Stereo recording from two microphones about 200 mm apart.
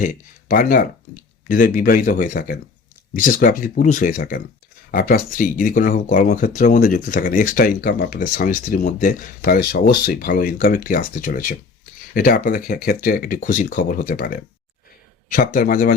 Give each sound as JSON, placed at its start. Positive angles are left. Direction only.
{"t": 0.0, "sound": "speech", "side_deg": 40}